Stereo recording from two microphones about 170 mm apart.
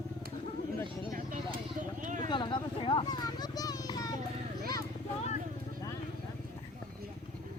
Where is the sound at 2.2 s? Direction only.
25° left (ahead or behind).